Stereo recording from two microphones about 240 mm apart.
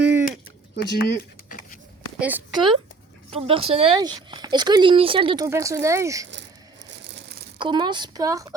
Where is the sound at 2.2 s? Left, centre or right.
Centre.